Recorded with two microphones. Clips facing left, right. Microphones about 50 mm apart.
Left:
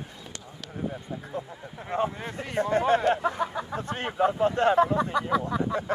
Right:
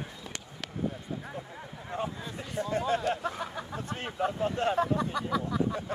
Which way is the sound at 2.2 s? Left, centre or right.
Left.